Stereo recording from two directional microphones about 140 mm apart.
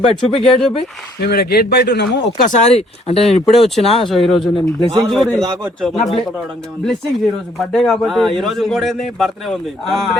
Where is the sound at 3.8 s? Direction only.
45° left (ahead or behind).